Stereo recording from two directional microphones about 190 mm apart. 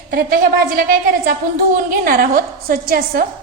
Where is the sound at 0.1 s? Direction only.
50° right (ahead or behind).